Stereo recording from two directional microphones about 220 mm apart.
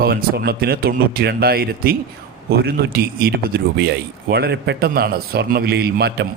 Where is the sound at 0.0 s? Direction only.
45° right (ahead or behind).